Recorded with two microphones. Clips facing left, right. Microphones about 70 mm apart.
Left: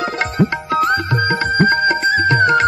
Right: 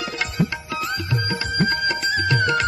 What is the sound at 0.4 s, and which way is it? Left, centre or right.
Music, left.